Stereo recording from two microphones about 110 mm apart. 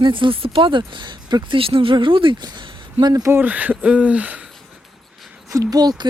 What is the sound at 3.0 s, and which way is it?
Speech, 30° right (ahead or behind).